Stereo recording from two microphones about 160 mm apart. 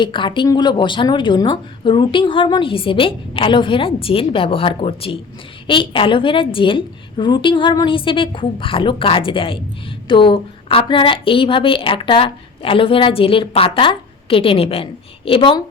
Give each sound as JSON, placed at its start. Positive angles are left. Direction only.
{"t": 0.0, "sound": "a woman's voice", "side_deg": 30}